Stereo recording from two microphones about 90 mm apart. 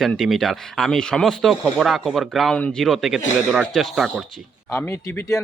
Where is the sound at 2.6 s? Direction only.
15° left (ahead or behind).